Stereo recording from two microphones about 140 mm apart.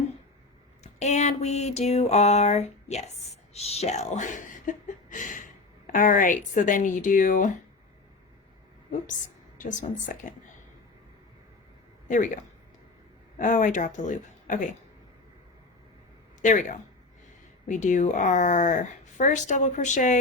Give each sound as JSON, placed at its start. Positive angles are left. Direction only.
{"t": 0.9, "sound": "a sound", "side_deg": 55}
{"t": 5.9, "sound": "speech", "side_deg": 70}
{"t": 9.6, "sound": "speech", "side_deg": 65}
{"t": 12.0, "sound": "speech", "side_deg": 65}
{"t": 16.4, "sound": "speech", "side_deg": 65}